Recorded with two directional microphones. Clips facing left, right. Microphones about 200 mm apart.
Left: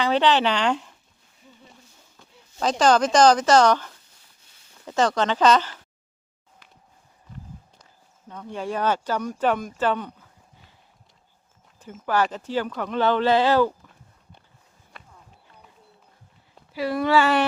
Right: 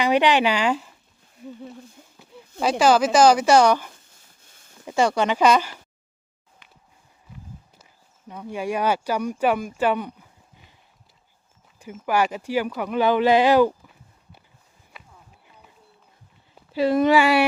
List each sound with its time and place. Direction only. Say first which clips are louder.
0.0 s speech: right 1 dB; 15° right (ahead or behind)
2.6 s speech: right 1 dB; 10° right (ahead or behind)
7.3 s walk: left 2 dB; 5° right (ahead or behind)
8.3 s speech: right 2 dB; 10° right (ahead or behind)
11.8 s speech: right 1 dB; 10° right (ahead or behind)
14.9 s a sound: even; centre (ahead or behind)
16.7 s speech: right 3 dB; 25° right (ahead or behind)